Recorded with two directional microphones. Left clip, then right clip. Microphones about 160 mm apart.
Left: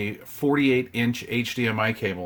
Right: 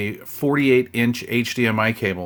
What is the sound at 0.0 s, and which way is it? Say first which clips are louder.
Speech: right 3 dB; 30° right (ahead or behind).